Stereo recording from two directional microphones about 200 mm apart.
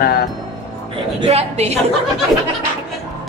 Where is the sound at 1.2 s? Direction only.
30° right (ahead or behind).